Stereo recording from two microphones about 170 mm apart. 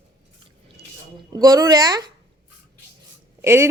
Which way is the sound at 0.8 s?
75° right (ahead or behind).